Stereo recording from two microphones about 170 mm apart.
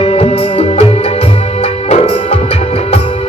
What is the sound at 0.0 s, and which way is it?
Music, 35° left (ahead or behind).